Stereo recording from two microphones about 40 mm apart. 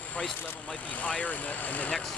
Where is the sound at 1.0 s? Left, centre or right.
Left.